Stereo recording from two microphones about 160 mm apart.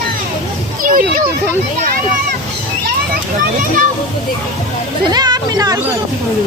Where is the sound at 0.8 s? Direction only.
60° right (ahead or behind).